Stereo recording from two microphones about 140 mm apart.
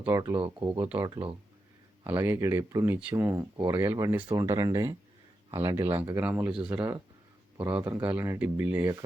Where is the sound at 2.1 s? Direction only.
20° right (ahead or behind).